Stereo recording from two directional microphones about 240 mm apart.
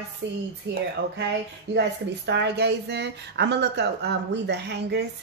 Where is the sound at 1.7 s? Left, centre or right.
Right.